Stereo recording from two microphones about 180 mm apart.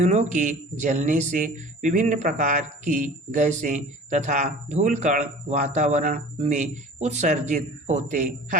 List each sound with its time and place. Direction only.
0.0 s speech: 40° right (ahead or behind)